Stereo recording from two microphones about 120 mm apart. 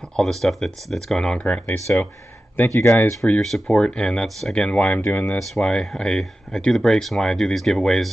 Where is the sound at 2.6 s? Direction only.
20° left (ahead or behind).